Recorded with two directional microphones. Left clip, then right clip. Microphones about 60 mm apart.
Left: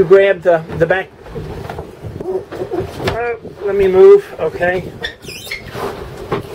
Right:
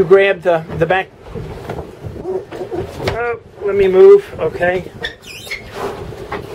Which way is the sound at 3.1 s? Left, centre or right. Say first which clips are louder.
Even; right.